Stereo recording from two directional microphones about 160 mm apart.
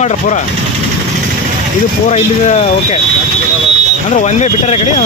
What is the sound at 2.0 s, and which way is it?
Speech, 45° left (ahead or behind).